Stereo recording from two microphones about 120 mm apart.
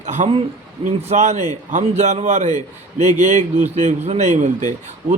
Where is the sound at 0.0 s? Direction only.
80° right.